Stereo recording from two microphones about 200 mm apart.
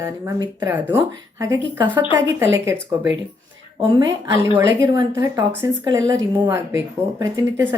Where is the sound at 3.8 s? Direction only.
20° right (ahead or behind).